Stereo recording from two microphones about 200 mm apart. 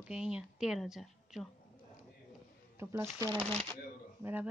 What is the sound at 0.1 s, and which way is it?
A woman's voice, 5° right (ahead or behind).